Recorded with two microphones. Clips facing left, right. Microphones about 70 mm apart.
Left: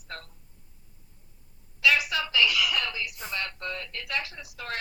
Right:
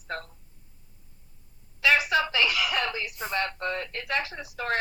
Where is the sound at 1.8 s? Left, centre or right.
Right.